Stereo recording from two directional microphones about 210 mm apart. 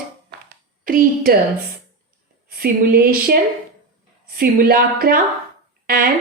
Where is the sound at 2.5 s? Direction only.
45° right (ahead or behind).